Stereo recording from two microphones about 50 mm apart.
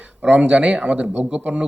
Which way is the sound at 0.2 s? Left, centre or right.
Right.